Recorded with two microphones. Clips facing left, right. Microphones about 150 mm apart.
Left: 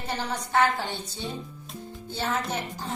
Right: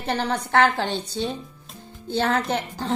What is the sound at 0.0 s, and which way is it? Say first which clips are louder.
A woman's voice: right 6 dB; 65° right (ahead or behind).